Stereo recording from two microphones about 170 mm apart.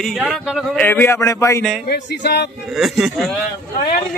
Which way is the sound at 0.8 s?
10° left (ahead or behind).